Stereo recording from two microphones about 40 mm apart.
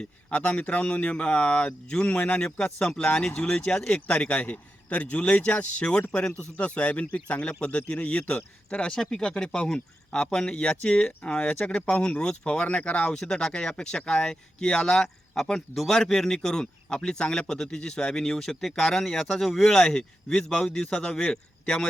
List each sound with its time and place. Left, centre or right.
0.0 s a man's voice: left
2.0 s a man's voice: left
2.7 s speech: centre
3.0 s a man's voice: left
9.0 s a man's voice: left
12.2 s speech: left
15.0 s speech: centre
20.6 s speech: left